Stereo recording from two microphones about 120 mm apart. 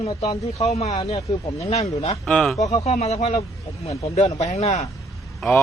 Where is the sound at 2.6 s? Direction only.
65° left (ahead or behind).